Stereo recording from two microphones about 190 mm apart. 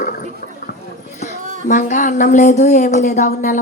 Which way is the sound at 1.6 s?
40° left (ahead or behind).